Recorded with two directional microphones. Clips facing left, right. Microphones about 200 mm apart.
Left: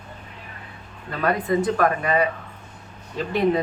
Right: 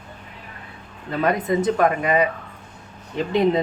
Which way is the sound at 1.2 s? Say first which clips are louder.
Right 1 dB; 20° right (ahead or behind).